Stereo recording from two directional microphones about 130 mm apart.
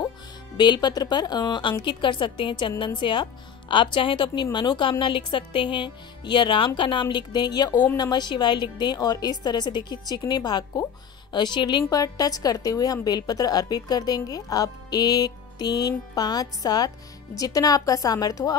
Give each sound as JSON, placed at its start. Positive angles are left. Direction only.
{"t": 0.6, "sound": "a woman's voice", "side_deg": 35}